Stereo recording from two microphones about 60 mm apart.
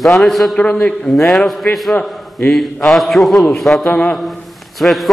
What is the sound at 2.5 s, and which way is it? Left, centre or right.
A man's voice, centre.